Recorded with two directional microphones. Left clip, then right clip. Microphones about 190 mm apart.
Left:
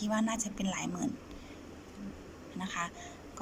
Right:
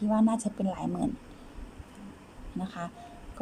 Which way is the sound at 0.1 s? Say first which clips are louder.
Right 6 dB; 30° right (ahead or behind).